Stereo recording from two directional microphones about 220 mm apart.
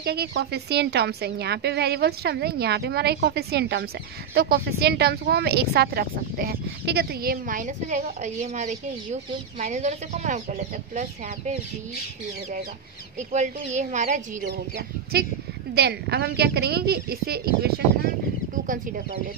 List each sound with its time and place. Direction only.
0.0 s a woman's voice: 45° right (ahead or behind)
13.3 s a woman's voice: 30° right (ahead or behind)
15.7 s a woman's voice: 50° right (ahead or behind)